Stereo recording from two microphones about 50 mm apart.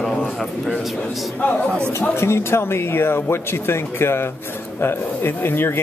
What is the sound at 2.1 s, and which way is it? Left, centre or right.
Speech, left.